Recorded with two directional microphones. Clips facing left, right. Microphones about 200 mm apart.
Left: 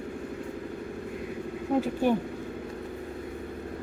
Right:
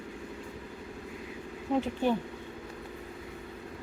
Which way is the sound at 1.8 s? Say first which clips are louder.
Left 4 dB; 10° left (ahead or behind).